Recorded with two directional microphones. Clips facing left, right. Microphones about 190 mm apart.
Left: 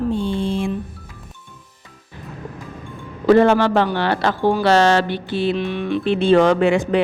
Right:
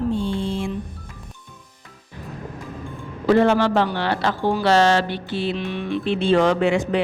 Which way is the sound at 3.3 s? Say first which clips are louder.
Left 3 dB; 55° left (ahead or behind).